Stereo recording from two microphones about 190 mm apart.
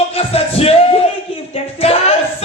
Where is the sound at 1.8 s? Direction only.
30° left (ahead or behind).